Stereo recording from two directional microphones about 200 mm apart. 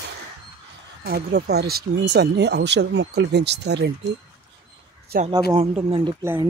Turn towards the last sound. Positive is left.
turn(degrees=-25)  # may be behind; listen again after turning